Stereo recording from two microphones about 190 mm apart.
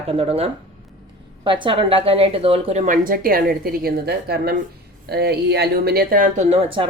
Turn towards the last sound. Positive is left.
turn(degrees=-25)  # may be behind; listen again after turning